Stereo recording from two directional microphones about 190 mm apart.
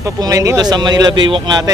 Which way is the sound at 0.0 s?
15° right (ahead or behind).